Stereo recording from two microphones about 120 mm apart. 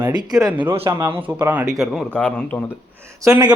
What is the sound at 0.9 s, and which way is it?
Speech, 25° right (ahead or behind).